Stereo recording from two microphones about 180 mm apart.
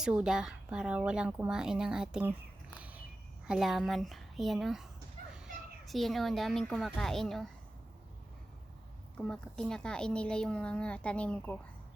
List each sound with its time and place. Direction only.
0.0 s a child's voice: 5° right (ahead or behind)
2.7 s a sound: 10° right (ahead or behind)
3.4 s a child's voice: 5° right (ahead or behind)
9.1 s a child's voice: 5° left (ahead or behind)